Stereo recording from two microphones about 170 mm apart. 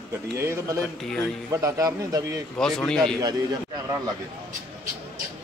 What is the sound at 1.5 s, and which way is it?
Speech, 20° right (ahead or behind).